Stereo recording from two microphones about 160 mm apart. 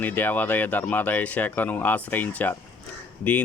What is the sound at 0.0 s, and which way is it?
Speech, 10° left (ahead or behind).